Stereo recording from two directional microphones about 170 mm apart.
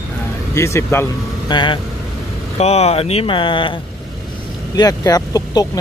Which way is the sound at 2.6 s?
40° left (ahead or behind).